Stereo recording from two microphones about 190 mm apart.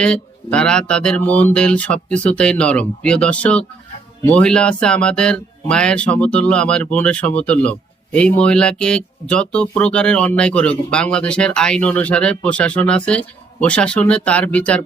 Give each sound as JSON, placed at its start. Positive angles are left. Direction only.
{"t": 0.0, "sound": "speech", "side_deg": 5}